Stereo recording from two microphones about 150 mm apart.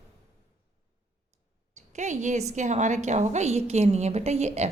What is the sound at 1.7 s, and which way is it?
A woman's voice, 50° right (ahead or behind).